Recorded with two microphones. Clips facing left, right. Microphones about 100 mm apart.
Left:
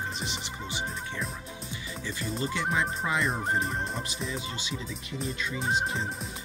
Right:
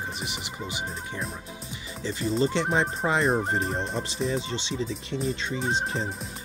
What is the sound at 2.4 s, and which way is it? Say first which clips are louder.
Fowl: right 5 dB; 30° right (ahead or behind).